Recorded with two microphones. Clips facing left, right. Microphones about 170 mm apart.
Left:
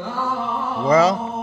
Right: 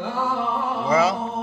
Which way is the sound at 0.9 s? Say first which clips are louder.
Left 5 dB; 5° right (ahead or behind).